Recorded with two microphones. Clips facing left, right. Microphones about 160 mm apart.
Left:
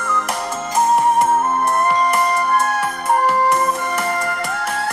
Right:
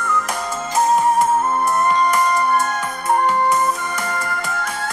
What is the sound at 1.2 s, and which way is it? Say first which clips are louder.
Music: left 1 dB; 55° left (ahead or behind).